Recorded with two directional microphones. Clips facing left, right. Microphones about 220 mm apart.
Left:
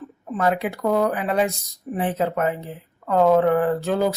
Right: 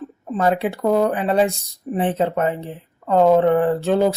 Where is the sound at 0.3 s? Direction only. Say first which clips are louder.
Right 3 dB; 30° right (ahead or behind).